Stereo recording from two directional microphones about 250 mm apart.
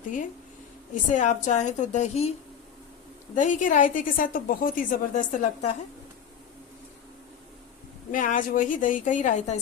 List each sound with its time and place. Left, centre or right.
1.1 s a woman's voice: left
3.3 s a woman's voice: left
8.1 s a woman's voice: left